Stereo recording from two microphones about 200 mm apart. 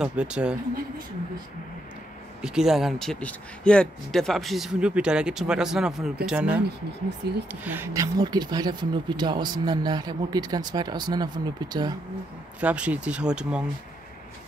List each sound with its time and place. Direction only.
0.0 s speech: 5° right (ahead or behind)
2.4 s speech: centre (ahead or behind)
7.2 s speech: 55° right (ahead or behind)
7.6 s speech: 10° right (ahead or behind)
12.5 s speech: 5° right (ahead or behind)